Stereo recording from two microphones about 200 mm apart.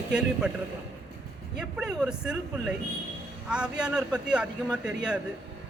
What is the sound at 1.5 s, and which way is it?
A man's voice, 5° right (ahead or behind).